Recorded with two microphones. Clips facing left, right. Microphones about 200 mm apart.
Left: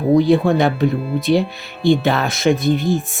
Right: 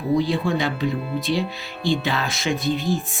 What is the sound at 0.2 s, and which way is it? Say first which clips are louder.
Speech: left 8 dB; 60° left (ahead or behind).